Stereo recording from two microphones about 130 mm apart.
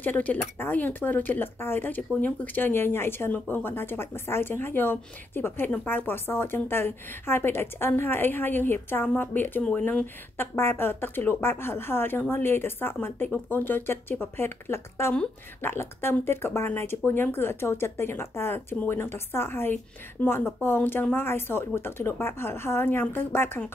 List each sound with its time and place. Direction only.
0.0 s speech: 15° left (ahead or behind)